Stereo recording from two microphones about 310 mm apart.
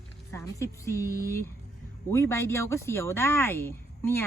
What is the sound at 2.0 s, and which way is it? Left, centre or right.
Speech, centre.